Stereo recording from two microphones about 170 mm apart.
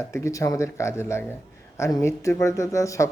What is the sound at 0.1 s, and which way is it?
Speech, 15° left (ahead or behind).